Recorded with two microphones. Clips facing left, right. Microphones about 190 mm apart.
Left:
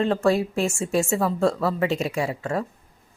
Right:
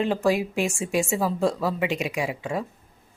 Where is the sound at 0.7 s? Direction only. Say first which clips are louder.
Left 2 dB; centre (ahead or behind).